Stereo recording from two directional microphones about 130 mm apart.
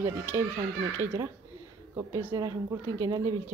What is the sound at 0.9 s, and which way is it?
Speech, 20° right (ahead or behind).